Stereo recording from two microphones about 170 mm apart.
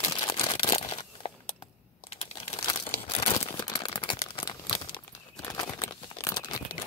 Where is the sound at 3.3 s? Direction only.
30° left (ahead or behind).